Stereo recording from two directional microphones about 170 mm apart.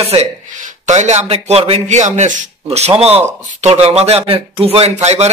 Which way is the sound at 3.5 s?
40° right (ahead or behind).